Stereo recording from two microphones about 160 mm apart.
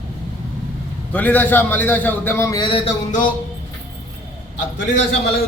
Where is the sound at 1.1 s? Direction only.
10° left (ahead or behind).